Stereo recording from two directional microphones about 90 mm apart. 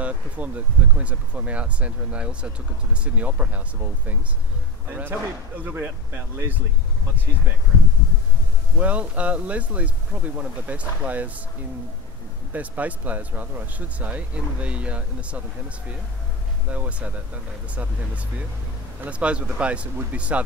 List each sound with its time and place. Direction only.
0.0 s speech: 15° right (ahead or behind)
8.7 s speech: 15° right (ahead or behind)
12.5 s speech: 20° right (ahead or behind)
16.7 s speech: 15° right (ahead or behind)
18.9 s speech: 15° right (ahead or behind)